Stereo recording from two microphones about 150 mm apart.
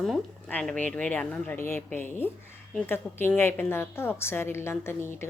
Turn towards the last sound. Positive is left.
turn(degrees=15)  # may be behind; listen again after turning